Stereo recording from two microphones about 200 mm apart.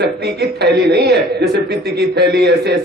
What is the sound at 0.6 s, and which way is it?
A man's voice, 55° right (ahead or behind).